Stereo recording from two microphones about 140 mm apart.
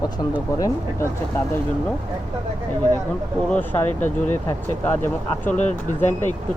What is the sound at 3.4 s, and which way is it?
Speech, 10° left (ahead or behind).